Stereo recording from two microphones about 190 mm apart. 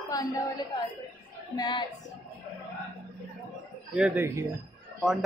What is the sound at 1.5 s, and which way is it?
Speech, 25° left (ahead or behind).